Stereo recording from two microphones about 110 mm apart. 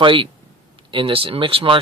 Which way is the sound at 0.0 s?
50° right (ahead or behind).